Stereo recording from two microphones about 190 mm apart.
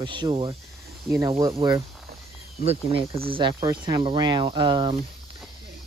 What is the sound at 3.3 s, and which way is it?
Speech, 25° right (ahead or behind).